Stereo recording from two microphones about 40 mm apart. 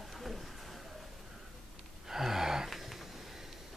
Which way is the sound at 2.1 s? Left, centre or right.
Centre.